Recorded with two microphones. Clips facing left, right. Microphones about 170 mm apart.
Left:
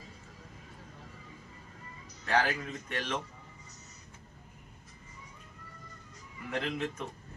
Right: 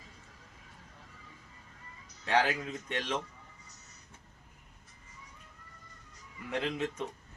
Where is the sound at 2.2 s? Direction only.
20° right (ahead or behind).